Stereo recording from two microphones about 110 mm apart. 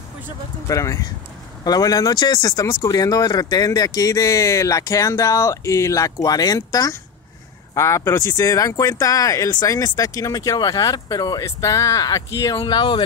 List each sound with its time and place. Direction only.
0.7 s speech: 30° left (ahead or behind)
12.5 s speech: 45° left (ahead or behind)